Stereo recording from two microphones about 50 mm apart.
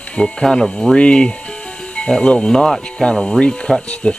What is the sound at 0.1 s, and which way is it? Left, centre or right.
Speech, centre.